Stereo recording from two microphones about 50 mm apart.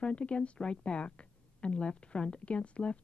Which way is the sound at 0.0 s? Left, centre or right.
Left.